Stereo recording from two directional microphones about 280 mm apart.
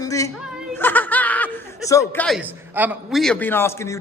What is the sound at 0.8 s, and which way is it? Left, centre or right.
Snicker, centre.